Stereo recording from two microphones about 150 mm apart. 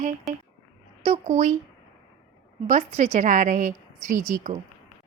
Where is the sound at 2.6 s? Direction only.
50° right (ahead or behind).